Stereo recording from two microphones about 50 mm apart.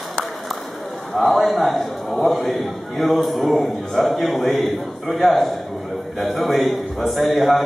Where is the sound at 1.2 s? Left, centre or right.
Centre.